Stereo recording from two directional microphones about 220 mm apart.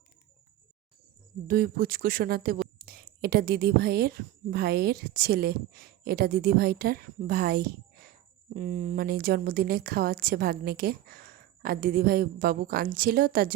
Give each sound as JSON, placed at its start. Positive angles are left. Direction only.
{"t": 1.5, "sound": "a woman's voice", "side_deg": -40}